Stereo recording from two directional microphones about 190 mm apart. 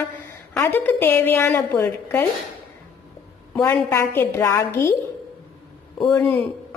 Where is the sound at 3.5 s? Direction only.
10° left (ahead or behind).